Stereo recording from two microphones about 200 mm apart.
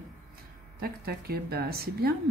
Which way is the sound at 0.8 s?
50° right (ahead or behind).